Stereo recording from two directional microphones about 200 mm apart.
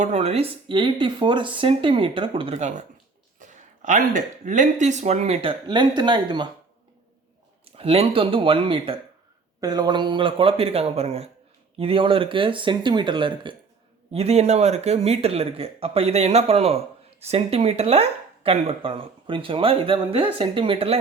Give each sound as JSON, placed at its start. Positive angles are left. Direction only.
{"t": 0.0, "sound": "speech", "side_deg": -35}
{"t": 7.6, "sound": "speech", "side_deg": -30}